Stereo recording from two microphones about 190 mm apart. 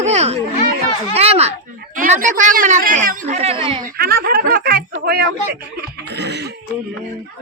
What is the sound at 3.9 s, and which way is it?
Speech, 55° right (ahead or behind).